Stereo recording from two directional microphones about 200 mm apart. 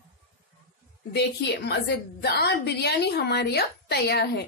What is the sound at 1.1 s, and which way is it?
A woman's voice, 55° left (ahead or behind).